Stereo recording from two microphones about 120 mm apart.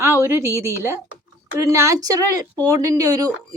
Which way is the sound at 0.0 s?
20° right (ahead or behind).